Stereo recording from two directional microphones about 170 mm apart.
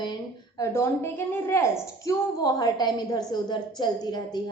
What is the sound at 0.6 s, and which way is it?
A woman's voice, 15° left (ahead or behind).